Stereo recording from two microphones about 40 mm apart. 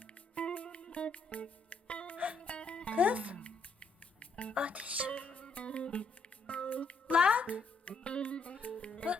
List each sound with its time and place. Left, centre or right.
0.0 s music: left
2.1 s music: right
2.4 s music: left
2.9 s speech: right
3.4 s music: left
4.5 s music: right
5.1 s music: left
7.1 s music: right
7.9 s music: left